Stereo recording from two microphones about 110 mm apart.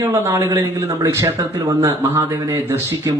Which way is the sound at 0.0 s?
30° right (ahead or behind).